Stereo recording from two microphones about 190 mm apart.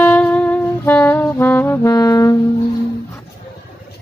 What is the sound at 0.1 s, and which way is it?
Saxophone, 10° left (ahead or behind).